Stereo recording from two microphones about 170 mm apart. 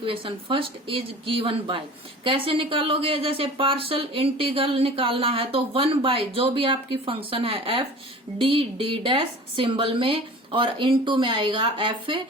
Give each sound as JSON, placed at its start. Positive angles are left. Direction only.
{"t": 0.0, "sound": "a woman's voice", "side_deg": -30}